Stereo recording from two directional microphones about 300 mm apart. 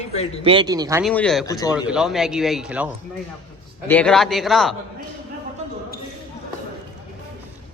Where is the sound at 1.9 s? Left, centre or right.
Centre.